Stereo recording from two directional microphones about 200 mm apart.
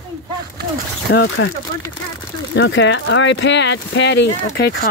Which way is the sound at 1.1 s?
60° left (ahead or behind).